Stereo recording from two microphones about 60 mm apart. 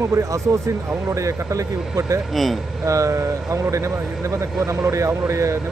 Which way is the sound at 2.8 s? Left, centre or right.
Right.